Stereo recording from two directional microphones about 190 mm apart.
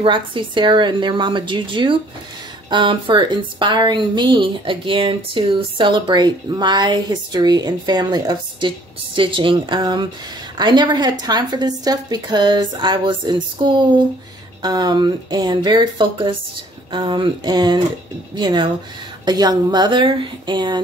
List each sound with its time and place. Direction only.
0.0 s a woman's voice: 25° right (ahead or behind)